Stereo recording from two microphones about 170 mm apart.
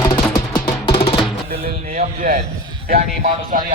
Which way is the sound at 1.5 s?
60° right (ahead or behind).